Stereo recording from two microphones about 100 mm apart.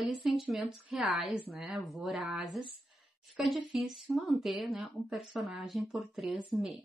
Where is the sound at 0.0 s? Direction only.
Centre (ahead or behind).